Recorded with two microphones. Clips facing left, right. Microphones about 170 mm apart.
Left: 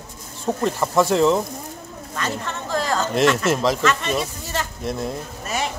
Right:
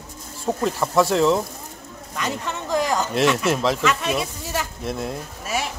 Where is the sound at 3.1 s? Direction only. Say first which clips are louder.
Left 2 dB; centre (ahead or behind).